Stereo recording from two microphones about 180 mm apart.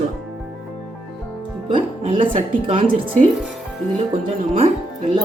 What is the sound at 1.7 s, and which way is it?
Speech, 30° right (ahead or behind).